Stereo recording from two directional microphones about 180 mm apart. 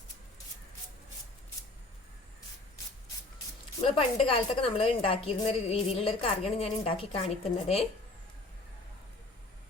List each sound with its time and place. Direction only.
3.8 s a woman's voice: 30° left (ahead or behind)